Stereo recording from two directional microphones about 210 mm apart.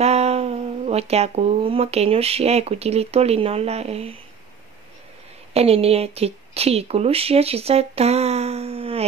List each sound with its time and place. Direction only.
0.0 s speech: 30° right (ahead or behind)
5.5 s speech: 30° right (ahead or behind)